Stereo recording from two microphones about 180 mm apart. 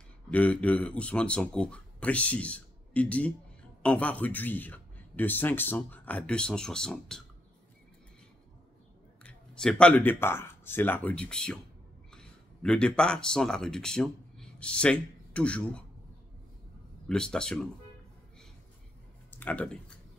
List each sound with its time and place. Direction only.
0.3 s a man's voice: 10° left (ahead or behind)
9.2 s speech: 5° left (ahead or behind)
17.1 s speech: 5° left (ahead or behind)
19.3 s speech: 10° left (ahead or behind)